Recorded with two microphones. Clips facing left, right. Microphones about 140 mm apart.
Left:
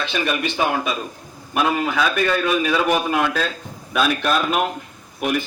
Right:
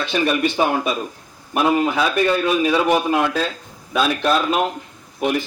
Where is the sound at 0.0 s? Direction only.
40° right (ahead or behind).